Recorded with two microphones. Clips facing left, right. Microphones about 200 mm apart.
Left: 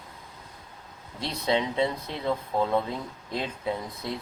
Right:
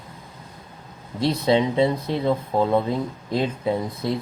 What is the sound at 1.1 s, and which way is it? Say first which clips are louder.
Speech: right 8 dB; 35° right (ahead or behind).